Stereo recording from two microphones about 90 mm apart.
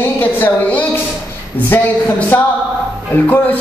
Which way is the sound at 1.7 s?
20° left (ahead or behind).